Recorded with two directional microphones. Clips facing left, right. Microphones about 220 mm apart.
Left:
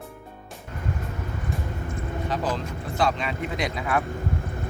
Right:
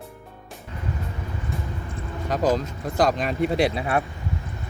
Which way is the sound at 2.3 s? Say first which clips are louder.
Right 7 dB; 40° right (ahead or behind).